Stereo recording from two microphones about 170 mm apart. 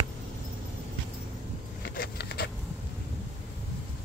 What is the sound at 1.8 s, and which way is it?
Vehicle, 70° left (ahead or behind).